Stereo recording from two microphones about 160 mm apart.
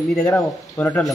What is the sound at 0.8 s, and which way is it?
Speech, 10° left (ahead or behind).